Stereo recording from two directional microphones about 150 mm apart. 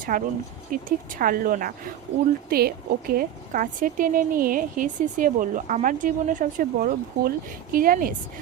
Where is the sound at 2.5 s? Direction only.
85° right.